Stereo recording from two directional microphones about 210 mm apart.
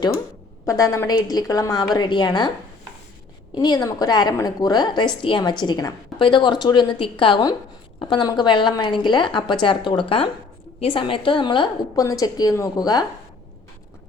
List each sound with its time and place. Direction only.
0.6 s a woman's voice: 15° left (ahead or behind)
3.5 s a woman's voice: 20° left (ahead or behind)